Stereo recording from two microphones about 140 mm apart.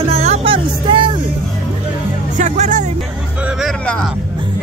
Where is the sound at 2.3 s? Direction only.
60° right (ahead or behind).